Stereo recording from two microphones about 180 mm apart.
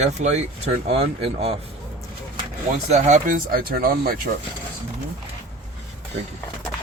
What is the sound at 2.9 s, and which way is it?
Speech, 40° right (ahead or behind).